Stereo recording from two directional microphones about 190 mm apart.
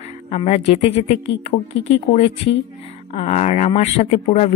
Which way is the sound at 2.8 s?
30° left (ahead or behind).